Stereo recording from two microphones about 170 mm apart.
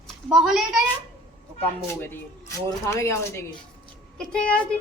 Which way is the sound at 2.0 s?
15° left (ahead or behind).